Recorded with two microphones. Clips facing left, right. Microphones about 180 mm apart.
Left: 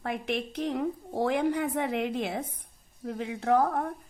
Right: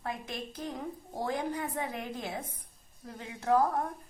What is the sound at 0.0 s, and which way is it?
A woman's voice, 70° left (ahead or behind).